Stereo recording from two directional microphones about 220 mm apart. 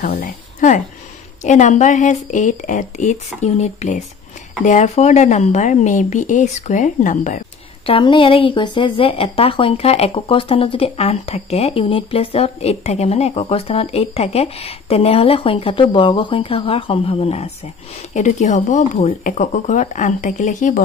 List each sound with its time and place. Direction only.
0.0 s speech: 40° left (ahead or behind)